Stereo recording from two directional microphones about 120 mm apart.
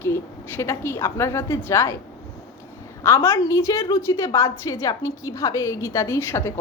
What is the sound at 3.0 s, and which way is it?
A woman's voice, 20° left (ahead or behind).